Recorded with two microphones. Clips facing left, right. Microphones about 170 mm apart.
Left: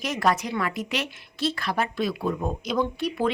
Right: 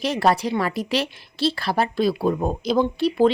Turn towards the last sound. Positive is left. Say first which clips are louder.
# right 7 dB
turn(degrees=-30)  # may be behind; listen again after turning